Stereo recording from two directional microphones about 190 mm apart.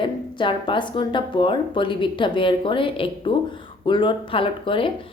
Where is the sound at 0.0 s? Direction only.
25° left (ahead or behind).